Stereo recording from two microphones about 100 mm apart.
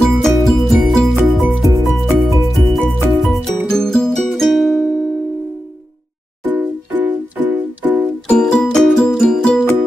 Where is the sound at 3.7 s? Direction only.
5° left (ahead or behind).